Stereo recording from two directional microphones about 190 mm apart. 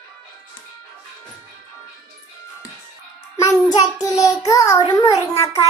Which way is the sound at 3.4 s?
15° left (ahead or behind).